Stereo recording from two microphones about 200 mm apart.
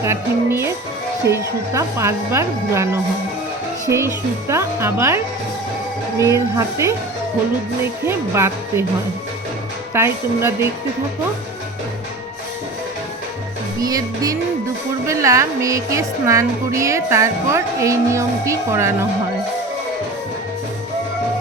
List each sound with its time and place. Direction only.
0.0 s speech: 15° right (ahead or behind)
8.0 s speech: 15° right (ahead or behind)
9.9 s speech: 10° right (ahead or behind)
13.8 s speech: 20° right (ahead or behind)